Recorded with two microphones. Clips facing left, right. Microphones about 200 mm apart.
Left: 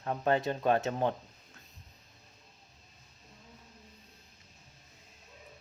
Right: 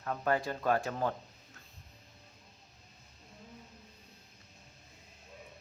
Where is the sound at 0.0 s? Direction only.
25° left (ahead or behind).